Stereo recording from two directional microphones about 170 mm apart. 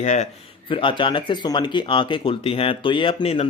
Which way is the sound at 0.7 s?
30° left (ahead or behind).